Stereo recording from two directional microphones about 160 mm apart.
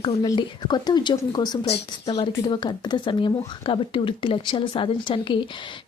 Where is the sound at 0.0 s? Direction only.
30° left (ahead or behind).